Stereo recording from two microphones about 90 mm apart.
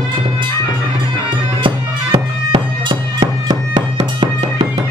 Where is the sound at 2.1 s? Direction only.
70° right (ahead or behind).